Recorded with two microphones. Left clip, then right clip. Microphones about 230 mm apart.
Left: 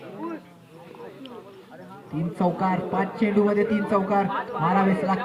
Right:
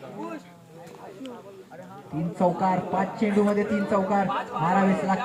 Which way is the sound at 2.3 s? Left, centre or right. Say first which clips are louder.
Right 1 dB; left.